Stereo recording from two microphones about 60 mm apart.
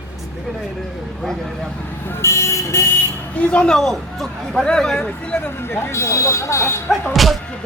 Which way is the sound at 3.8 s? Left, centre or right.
Centre.